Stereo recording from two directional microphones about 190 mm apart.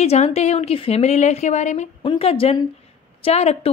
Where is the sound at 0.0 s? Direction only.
35° left (ahead or behind).